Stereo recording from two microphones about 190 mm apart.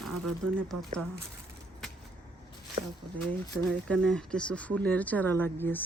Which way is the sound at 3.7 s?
5° left (ahead or behind).